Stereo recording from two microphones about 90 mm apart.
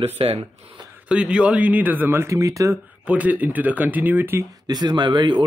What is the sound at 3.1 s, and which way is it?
Speech, 15° right (ahead or behind).